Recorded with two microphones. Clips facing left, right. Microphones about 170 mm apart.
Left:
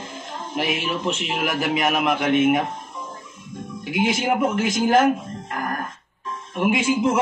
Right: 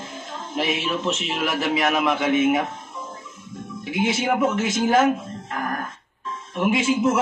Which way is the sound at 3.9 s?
Centre (ahead or behind).